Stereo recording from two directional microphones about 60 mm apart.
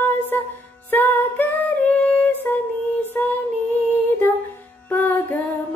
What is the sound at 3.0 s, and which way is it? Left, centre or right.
Music, left.